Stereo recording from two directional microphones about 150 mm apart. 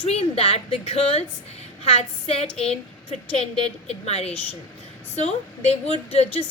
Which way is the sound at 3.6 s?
45° left (ahead or behind).